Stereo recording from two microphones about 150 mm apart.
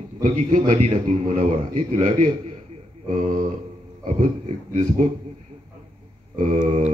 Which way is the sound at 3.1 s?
60° right (ahead or behind).